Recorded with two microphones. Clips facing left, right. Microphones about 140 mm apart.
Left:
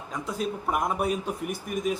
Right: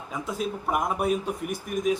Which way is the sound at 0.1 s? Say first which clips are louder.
Even; centre (ahead or behind).